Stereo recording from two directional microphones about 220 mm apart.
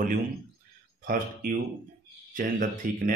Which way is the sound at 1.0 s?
40° right (ahead or behind).